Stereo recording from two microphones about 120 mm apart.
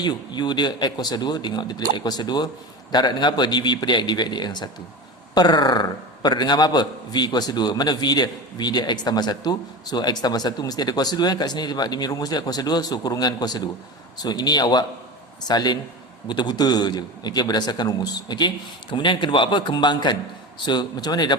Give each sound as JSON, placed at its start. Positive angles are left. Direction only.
{"t": 0.0, "sound": "a man's voice", "side_deg": 35}